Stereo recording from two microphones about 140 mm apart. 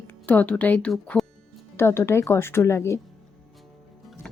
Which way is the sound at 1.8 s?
15° left (ahead or behind).